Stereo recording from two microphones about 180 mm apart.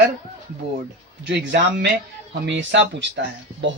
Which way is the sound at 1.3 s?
70° right (ahead or behind).